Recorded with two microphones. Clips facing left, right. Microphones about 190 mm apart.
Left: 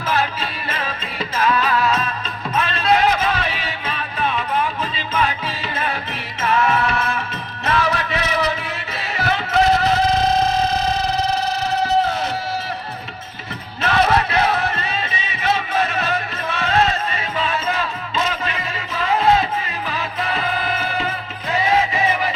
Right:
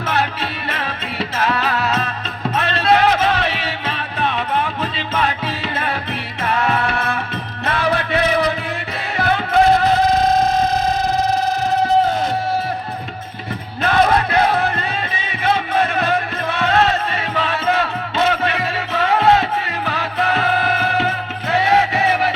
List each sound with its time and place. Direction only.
0.0 s music: 65° right (ahead or behind)
13.8 s music: 55° right (ahead or behind); by 22.1 s 70° right (ahead or behind)